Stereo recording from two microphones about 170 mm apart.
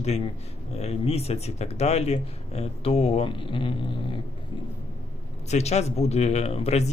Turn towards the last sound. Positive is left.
turn(degrees=35)  # may be behind; listen again after turning